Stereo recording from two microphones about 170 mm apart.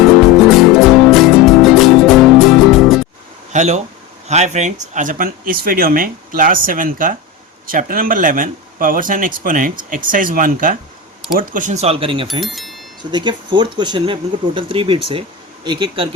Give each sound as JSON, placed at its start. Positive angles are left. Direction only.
{"t": 0.3, "sound": "music", "side_deg": 0}
{"t": 3.5, "sound": "speech", "side_deg": -45}
{"t": 12.4, "sound": "speech", "side_deg": 0}
{"t": 13.0, "sound": "speech", "side_deg": -25}